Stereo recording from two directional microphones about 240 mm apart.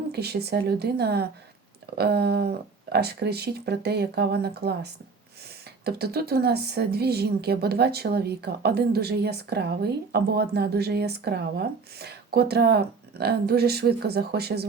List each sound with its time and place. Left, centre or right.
0.1 s a woman's voice: right